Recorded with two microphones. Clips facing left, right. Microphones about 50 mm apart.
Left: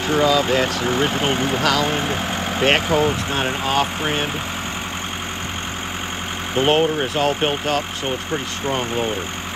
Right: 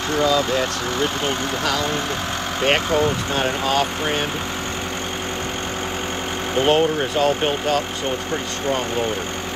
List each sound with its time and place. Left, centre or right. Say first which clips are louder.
0.1 s speech: left 2 dB; left
2.6 s speech: left 1 dB; centre
6.5 s speech: even; centre